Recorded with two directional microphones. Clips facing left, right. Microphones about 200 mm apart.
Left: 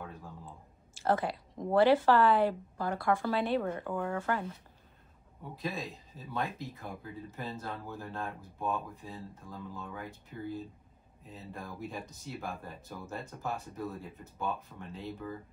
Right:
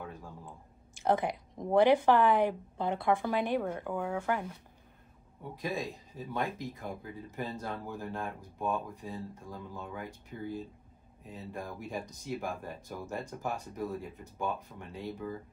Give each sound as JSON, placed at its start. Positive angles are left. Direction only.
{"t": 0.9, "sound": "speech", "side_deg": -15}
{"t": 5.6, "sound": "speech", "side_deg": -15}
{"t": 11.5, "sound": "speech", "side_deg": -15}